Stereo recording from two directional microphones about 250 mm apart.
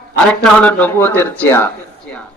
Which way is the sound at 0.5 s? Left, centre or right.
Centre.